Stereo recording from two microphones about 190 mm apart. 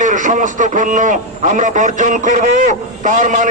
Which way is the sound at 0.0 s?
40° right (ahead or behind).